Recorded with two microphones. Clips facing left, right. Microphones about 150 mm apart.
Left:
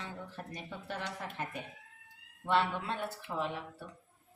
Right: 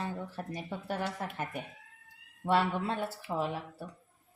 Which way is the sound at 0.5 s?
45° right (ahead or behind).